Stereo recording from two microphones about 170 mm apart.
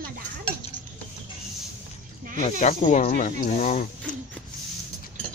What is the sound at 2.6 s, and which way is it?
Speech, 45° left (ahead or behind).